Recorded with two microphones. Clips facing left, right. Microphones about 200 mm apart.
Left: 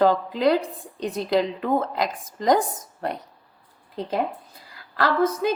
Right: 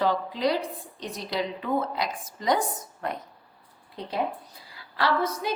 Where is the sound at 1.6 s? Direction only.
50° left (ahead or behind).